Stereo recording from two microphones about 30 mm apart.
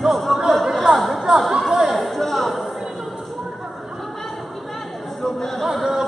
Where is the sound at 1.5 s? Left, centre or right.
Centre.